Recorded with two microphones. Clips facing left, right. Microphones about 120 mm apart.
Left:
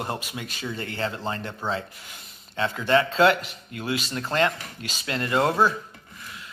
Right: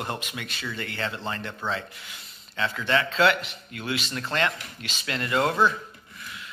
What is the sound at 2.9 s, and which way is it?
Speech, 35° left (ahead or behind).